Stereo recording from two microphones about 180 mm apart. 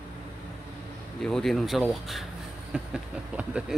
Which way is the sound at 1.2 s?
Centre (ahead or behind).